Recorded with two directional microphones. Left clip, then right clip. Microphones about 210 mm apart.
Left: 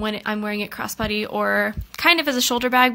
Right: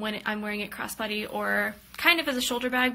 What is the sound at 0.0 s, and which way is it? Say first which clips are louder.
Speech: left 6 dB; 45° left (ahead or behind).